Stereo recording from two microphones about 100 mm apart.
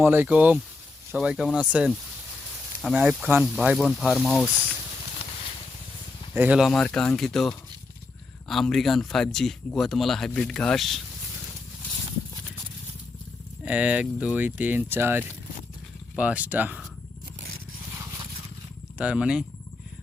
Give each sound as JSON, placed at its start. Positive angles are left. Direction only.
{"t": 0.0, "sound": "speech", "side_deg": -20}
{"t": 6.3, "sound": "speech", "side_deg": -15}
{"t": 6.6, "sound": "speech", "side_deg": 5}
{"t": 13.7, "sound": "speech", "side_deg": -10}
{"t": 18.9, "sound": "speech", "side_deg": -10}